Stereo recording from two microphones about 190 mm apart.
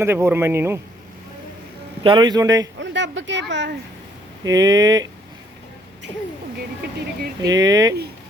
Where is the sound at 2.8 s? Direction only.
75° right (ahead or behind).